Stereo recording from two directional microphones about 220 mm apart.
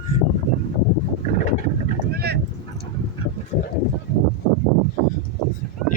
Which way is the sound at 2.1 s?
45° right (ahead or behind).